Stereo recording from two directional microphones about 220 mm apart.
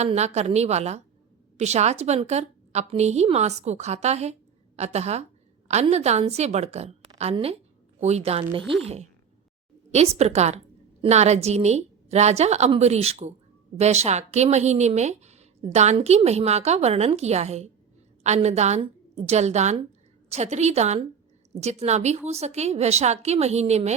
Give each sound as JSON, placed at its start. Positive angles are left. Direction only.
{"t": 0.0, "sound": "a woman's voice", "side_deg": -30}
{"t": 8.6, "sound": "speech", "side_deg": -55}
{"t": 9.9, "sound": "a woman's voice", "side_deg": -30}